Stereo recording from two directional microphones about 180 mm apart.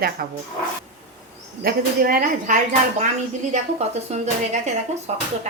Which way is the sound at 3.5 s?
40° right (ahead or behind).